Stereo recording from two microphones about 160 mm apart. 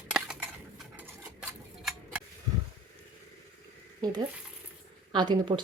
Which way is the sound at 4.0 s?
25° right (ahead or behind).